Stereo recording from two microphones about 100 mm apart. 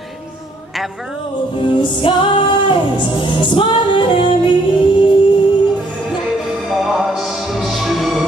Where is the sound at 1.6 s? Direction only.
55° left (ahead or behind).